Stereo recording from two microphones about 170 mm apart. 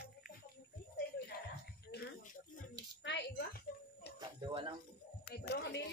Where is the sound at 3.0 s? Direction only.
80° left.